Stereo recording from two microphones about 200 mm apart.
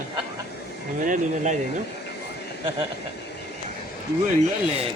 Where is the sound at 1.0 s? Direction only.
40° right (ahead or behind).